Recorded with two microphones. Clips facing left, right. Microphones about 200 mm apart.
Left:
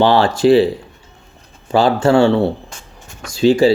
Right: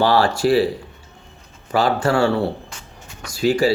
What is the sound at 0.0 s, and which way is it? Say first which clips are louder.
Speech: left 4 dB; 25° left (ahead or behind).